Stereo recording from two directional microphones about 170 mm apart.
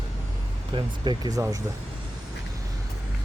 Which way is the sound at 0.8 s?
25° right (ahead or behind).